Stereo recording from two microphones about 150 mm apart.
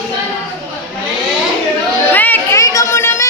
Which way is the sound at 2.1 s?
10° left (ahead or behind).